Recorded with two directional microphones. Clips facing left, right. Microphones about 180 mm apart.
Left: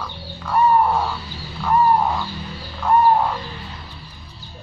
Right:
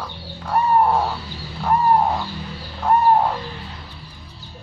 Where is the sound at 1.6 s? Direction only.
45° right (ahead or behind).